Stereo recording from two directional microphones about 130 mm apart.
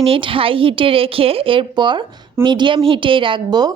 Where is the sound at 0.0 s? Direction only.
45° right (ahead or behind).